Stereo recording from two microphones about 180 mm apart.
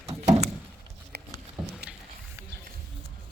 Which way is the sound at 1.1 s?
60° right (ahead or behind).